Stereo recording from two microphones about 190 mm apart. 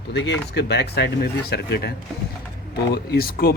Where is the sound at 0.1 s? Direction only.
65° left (ahead or behind).